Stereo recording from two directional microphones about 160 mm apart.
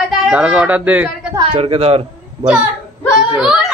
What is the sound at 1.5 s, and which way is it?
Speech, 35° right (ahead or behind).